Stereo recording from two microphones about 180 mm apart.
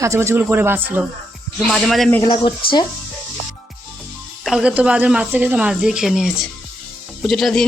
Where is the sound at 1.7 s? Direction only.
Centre (ahead or behind).